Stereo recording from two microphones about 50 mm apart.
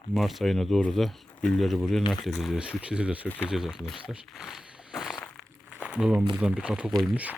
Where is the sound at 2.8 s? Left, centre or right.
Right.